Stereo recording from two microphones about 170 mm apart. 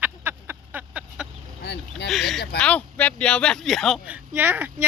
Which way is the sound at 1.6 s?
80° left.